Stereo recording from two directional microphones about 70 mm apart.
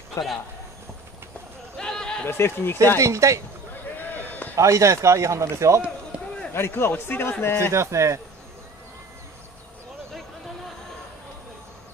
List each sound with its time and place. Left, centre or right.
0.2 s speech: left
1.8 s a sound: centre
2.2 s a man's voice: left
3.0 s speech: right
4.0 s a sound: left
4.6 s speech: right
6.1 s run: right
6.5 s a man's voice: left
7.7 s speech: right